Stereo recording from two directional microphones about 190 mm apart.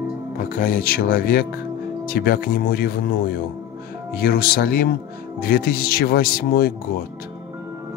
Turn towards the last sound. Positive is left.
turn(degrees=50)  # may be behind; listen again after turning